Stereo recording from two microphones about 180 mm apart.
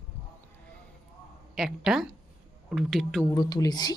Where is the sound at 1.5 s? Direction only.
Centre (ahead or behind).